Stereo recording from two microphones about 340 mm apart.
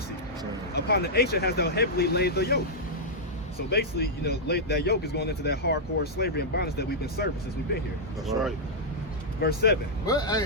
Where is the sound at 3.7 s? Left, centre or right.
Left.